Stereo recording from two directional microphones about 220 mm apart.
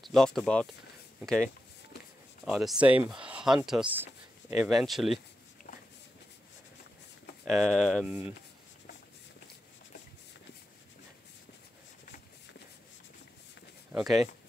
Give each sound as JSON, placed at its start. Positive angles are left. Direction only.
{"t": 0.0, "sound": "speech", "side_deg": 0}
{"t": 2.4, "sound": "speech", "side_deg": -5}
{"t": 7.4, "sound": "speech", "side_deg": 0}
{"t": 13.9, "sound": "speech", "side_deg": 0}